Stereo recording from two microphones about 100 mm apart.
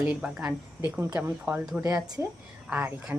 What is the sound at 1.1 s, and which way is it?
Speech, 20° right (ahead or behind).